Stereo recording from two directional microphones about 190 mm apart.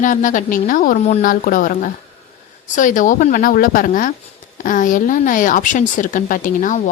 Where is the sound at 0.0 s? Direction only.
40° left (ahead or behind).